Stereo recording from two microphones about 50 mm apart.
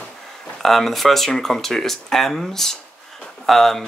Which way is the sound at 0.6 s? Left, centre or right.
Centre.